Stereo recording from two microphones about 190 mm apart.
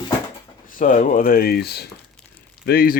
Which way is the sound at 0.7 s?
45° left (ahead or behind).